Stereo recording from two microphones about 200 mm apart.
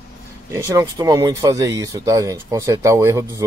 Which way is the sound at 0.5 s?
15° right (ahead or behind).